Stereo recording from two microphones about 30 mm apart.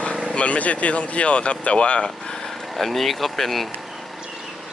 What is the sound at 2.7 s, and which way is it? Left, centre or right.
Speech, centre.